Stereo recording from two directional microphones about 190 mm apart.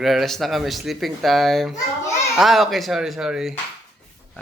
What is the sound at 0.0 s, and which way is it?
A man's voice, centre (ahead or behind).